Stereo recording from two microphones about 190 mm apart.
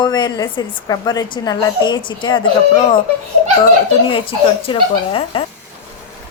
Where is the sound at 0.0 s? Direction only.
20° left (ahead or behind).